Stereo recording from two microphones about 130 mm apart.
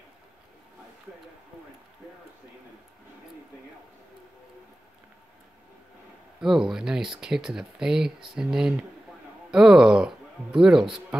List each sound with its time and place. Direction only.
6.4 s speech: 5° right (ahead or behind)